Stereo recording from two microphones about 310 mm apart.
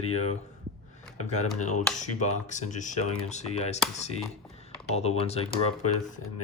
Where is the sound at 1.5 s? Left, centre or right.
Left.